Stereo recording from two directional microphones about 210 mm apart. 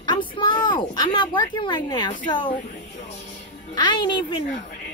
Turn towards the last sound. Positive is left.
turn(degrees=20)  # may be behind; listen again after turning